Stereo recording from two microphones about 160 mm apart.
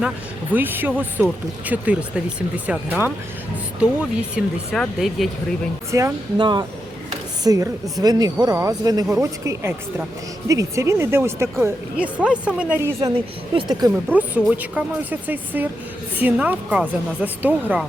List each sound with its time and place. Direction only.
0.5 s speech: 10° right (ahead or behind)
4.4 s speech: centre (ahead or behind)
5.9 s speech: 20° right (ahead or behind)
6.3 s speech: 30° right (ahead or behind)
13.1 s speech: 30° right (ahead or behind)
14.1 s speech: 10° right (ahead or behind)